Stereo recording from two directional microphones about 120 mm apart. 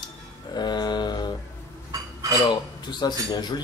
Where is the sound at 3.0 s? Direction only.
35° left (ahead or behind).